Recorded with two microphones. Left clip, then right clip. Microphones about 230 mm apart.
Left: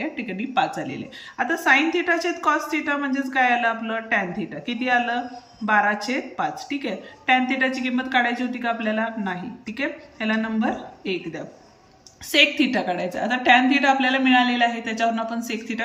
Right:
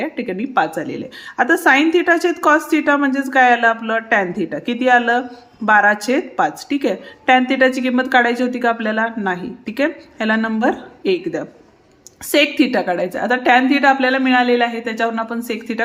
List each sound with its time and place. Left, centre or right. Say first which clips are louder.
0.0 s a woman's voice: right 6 dB; right